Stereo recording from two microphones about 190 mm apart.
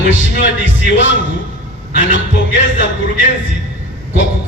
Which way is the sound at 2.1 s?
65° left (ahead or behind).